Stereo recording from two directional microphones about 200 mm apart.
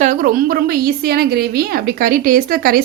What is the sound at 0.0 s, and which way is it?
A woman's voice, 40° right (ahead or behind).